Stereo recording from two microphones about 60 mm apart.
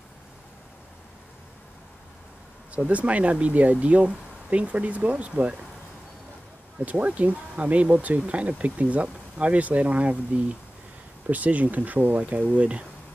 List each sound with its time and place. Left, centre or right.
2.7 s speech: right
6.8 s speech: right